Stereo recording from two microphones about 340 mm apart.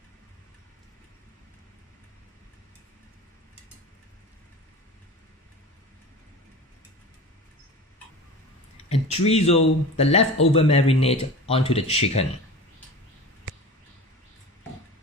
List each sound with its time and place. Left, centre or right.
8.9 s speech: centre